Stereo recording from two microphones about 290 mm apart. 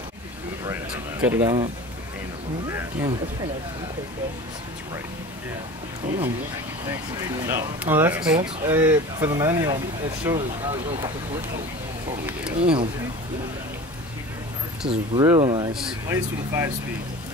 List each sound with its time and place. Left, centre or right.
1.2 s speech: centre
2.7 s speech: centre
7.4 s speech: centre
12.5 s speech: centre
14.9 s speech: centre